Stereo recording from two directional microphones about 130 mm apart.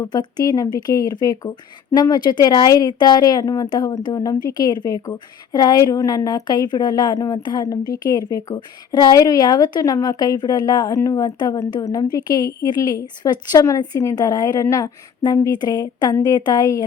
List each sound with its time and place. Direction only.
0.0 s a woman's voice: 30° left (ahead or behind)